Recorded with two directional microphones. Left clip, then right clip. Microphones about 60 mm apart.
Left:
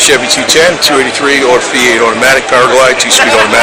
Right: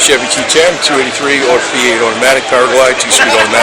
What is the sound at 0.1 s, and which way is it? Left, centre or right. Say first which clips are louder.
Speech: left 2 dB; left.